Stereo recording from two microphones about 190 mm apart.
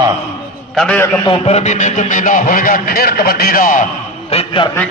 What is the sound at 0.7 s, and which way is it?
Speech, 5° left (ahead or behind).